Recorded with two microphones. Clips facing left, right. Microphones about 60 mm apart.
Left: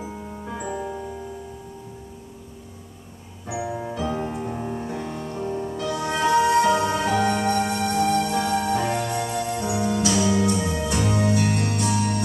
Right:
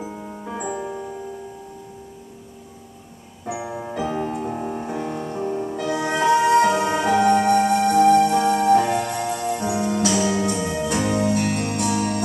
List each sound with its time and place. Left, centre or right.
0.0 s music: centre
3.4 s music: right
10.1 s music: centre